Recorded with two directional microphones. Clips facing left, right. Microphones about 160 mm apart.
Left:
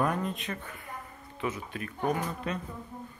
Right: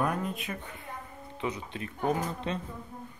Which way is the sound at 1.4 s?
25° right (ahead or behind).